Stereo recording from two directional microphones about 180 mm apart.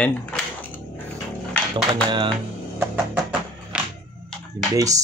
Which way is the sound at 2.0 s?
25° right (ahead or behind).